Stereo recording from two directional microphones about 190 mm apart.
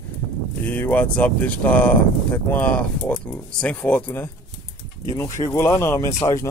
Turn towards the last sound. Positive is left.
turn(degrees=15)  # may be behind; listen again after turning